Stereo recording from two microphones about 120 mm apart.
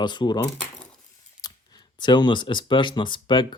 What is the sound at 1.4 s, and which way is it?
Speech, 35° left (ahead or behind).